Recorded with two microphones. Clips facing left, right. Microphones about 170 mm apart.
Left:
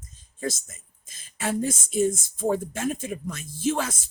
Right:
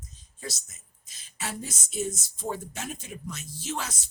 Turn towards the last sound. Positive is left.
turn(degrees=50)  # may be behind; listen again after turning